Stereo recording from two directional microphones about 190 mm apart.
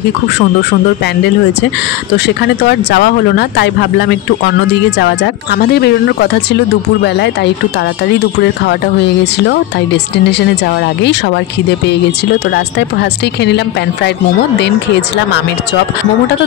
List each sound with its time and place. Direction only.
2.1 s speech: 60° left (ahead or behind)
4.9 s speech: 60° left (ahead or behind)
12.4 s speech: 60° left (ahead or behind)